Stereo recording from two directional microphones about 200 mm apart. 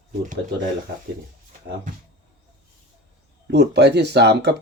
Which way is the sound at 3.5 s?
55° right (ahead or behind).